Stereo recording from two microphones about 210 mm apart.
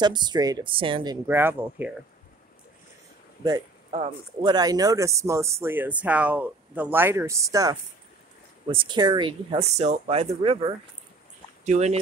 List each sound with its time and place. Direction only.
0.0 s speech: 20° right (ahead or behind)
4.4 s speech: 20° right (ahead or behind)